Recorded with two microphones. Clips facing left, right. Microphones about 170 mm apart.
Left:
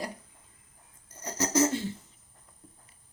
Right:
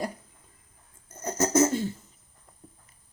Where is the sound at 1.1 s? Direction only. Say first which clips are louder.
Right 4 dB; 50° right (ahead or behind).